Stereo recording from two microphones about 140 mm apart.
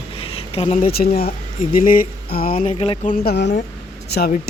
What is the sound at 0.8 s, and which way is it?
Music, 90° left.